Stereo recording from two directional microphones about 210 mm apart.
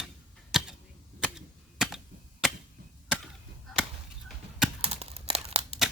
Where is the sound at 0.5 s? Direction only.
Centre (ahead or behind).